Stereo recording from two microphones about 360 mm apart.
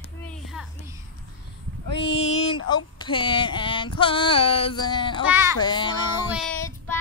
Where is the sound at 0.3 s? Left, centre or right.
Centre.